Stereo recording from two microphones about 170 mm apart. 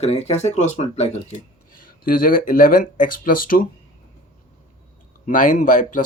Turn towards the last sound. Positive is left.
turn(degrees=50)  # may be behind; listen again after turning